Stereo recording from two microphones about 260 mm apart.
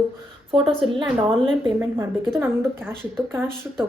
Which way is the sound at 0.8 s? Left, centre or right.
Centre.